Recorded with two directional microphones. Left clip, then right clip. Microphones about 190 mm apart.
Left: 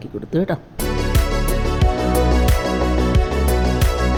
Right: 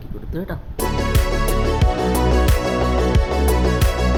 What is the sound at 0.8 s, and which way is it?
Music, centre (ahead or behind).